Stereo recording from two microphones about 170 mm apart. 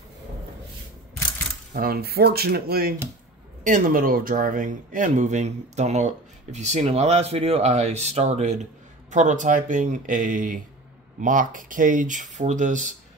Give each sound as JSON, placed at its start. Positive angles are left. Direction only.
{"t": 1.7, "sound": "speech", "side_deg": -60}
{"t": 3.6, "sound": "speech", "side_deg": -50}